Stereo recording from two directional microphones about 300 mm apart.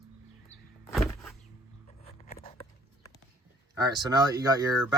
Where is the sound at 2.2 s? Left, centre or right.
Left.